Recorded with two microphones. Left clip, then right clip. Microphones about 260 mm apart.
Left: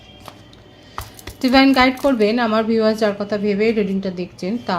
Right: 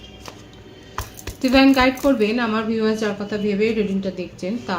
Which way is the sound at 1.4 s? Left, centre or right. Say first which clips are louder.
Left 2 dB; left.